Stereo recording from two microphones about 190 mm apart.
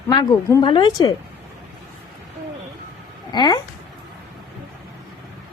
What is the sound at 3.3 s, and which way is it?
Speech, 25° left (ahead or behind).